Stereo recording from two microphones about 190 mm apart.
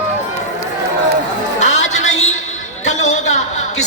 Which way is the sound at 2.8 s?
40° left (ahead or behind).